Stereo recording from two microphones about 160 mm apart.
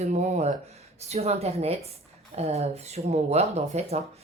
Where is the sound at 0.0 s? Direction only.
45° right (ahead or behind).